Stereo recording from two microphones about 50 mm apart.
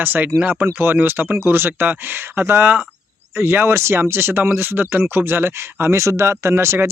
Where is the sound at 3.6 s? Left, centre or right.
Right.